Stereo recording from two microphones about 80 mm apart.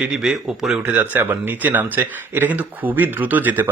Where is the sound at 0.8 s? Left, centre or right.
Right.